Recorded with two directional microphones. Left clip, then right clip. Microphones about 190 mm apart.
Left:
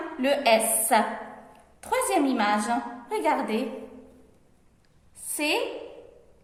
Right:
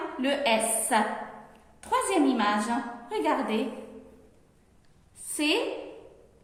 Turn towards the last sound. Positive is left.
turn(degrees=25)  # may be behind; listen again after turning